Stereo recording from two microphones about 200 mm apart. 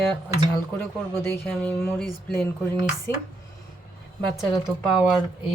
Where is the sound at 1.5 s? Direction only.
5° left (ahead or behind).